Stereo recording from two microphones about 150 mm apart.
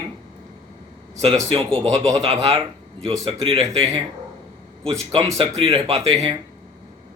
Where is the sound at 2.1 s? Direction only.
40° right (ahead or behind).